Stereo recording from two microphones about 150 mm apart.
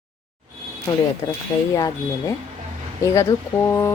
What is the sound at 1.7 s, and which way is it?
Speech, 25° left (ahead or behind).